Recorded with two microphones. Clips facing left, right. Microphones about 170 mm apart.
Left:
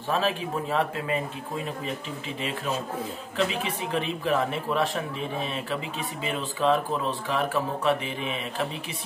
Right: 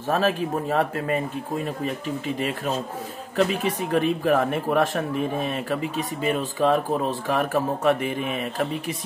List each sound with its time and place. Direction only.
0.1 s speech: 45° right (ahead or behind)